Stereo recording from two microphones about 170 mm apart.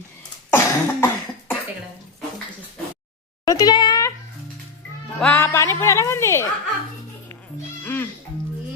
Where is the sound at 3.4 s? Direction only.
20° left (ahead or behind).